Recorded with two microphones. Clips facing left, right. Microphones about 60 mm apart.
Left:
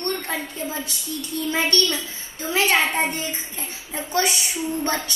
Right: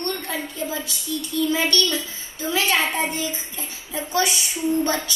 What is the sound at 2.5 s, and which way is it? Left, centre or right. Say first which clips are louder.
Child singing: left 2 dB; left.